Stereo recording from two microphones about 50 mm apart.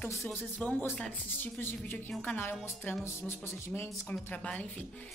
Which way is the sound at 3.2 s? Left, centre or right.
Left.